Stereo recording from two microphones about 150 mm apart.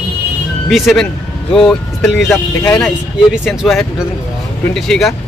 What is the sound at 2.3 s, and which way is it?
Speech, 25° left (ahead or behind).